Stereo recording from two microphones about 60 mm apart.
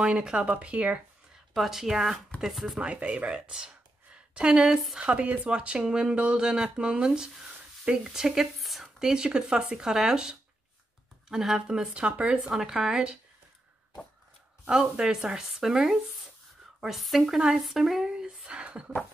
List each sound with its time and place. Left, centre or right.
0.0 s speech: centre
1.5 s a woman's voice: centre
2.8 s speech: centre
8.8 s speech: centre
12.4 s speech: centre
14.7 s a woman's voice: centre